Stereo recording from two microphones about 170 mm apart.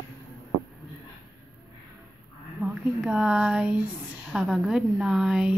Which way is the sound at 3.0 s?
5° right (ahead or behind).